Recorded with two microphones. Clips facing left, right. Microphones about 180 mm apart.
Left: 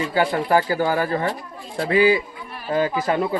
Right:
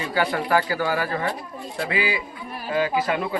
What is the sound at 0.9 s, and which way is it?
Speech, 45° left (ahead or behind).